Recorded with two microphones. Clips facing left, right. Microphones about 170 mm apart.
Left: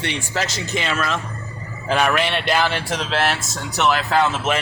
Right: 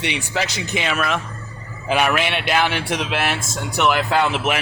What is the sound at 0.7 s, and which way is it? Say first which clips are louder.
Speech: right 1 dB; 5° right (ahead or behind).